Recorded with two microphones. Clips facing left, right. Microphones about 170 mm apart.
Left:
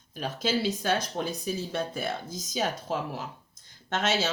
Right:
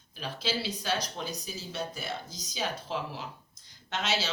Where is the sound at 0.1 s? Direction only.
45° left (ahead or behind).